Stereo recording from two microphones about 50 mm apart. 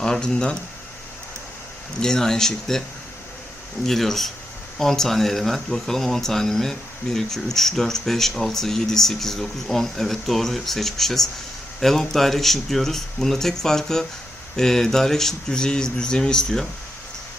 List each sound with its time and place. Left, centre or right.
0.0 s speech: centre
2.0 s speech: centre
3.8 s speech: centre